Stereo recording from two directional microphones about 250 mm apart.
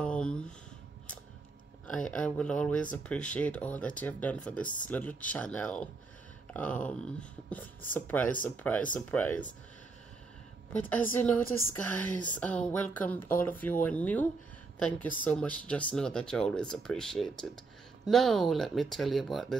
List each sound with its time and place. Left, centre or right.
0.0 s speech: centre
1.9 s a woman's voice: centre
10.8 s a woman's voice: centre